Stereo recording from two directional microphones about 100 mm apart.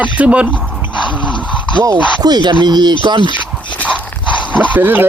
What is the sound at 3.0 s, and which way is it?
Speech, 55° right (ahead or behind).